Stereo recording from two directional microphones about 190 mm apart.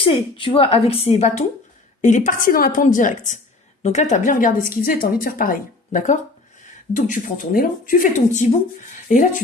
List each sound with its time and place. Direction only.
0.0 s a woman's voice: 30° left (ahead or behind); by 9.4 s 45° left (ahead or behind)